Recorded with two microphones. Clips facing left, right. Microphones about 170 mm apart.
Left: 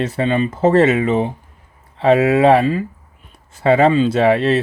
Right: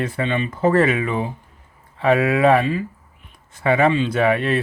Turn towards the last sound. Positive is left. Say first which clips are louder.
# left 4 dB
turn(degrees=30)  # may be behind; listen again after turning